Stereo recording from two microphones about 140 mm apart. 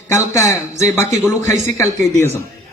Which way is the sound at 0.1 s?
20° left (ahead or behind).